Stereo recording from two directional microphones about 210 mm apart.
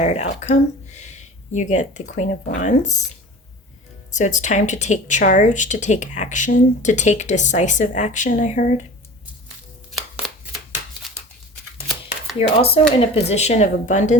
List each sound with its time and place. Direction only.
0.0 s speech: 30° left (ahead or behind)
4.1 s speech: 35° left (ahead or behind)
12.4 s speech: 30° left (ahead or behind)